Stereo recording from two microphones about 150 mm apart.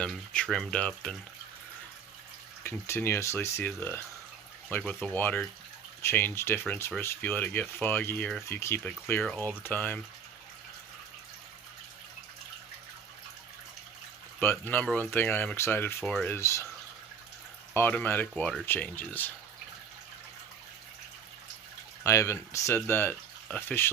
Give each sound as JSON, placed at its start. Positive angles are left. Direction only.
{"t": 0.0, "sound": "speech", "side_deg": 5}
{"t": 2.6, "sound": "speech", "side_deg": 15}
{"t": 14.7, "sound": "speech", "side_deg": 10}
{"t": 17.7, "sound": "speech", "side_deg": 15}
{"t": 22.0, "sound": "speech", "side_deg": 20}